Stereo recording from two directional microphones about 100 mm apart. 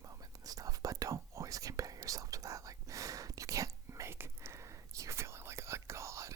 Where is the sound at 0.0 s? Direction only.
35° right (ahead or behind).